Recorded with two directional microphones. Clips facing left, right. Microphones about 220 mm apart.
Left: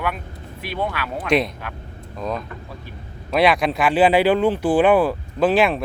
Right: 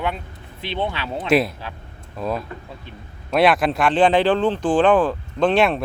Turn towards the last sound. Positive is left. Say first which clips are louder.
# even
turn(degrees=0)  # may be behind; listen again after turning